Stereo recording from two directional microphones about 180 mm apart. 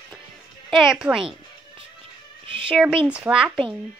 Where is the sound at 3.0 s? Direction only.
5° right (ahead or behind).